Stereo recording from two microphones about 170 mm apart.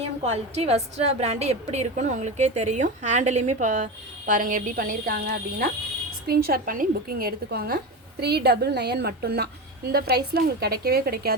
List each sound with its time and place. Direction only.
0.0 s a woman's voice: 40° right (ahead or behind); by 11.3 s 65° right (ahead or behind)